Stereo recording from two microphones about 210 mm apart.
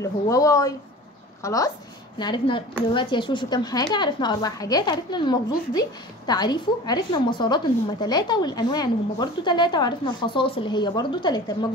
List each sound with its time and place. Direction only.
0.0 s a woman's voice: 15° left (ahead or behind)